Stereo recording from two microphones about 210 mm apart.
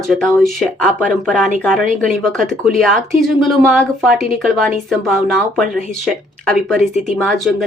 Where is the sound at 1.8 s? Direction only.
40° right (ahead or behind).